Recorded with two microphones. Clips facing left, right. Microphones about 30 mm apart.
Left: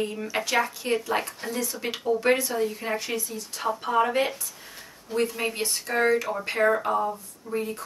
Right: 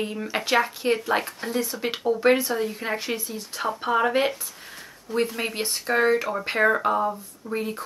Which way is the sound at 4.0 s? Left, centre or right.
Right.